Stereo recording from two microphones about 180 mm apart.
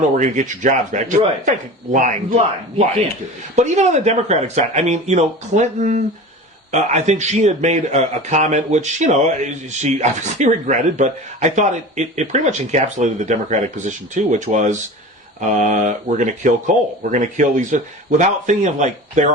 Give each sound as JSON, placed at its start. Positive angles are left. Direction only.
{"t": 0.2, "sound": "a man's voice", "side_deg": -45}